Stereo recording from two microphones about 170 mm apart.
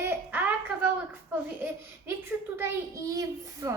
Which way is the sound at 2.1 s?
15° right (ahead or behind).